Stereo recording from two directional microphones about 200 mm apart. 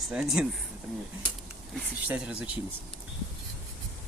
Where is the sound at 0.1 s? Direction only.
5° right (ahead or behind).